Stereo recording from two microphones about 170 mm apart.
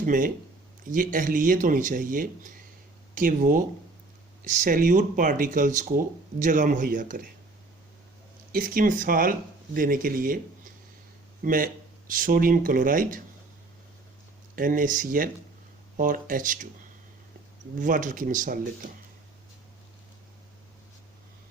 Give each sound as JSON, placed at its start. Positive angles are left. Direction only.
{"t": 0.0, "sound": "speech", "side_deg": -50}
{"t": 4.6, "sound": "speech", "side_deg": -50}
{"t": 8.5, "sound": "speech", "side_deg": -55}
{"t": 14.5, "sound": "speech", "side_deg": -55}
{"t": 17.7, "sound": "speech", "side_deg": -50}